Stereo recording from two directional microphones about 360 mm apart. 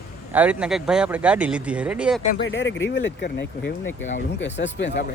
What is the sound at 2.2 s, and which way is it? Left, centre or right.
Speech, left.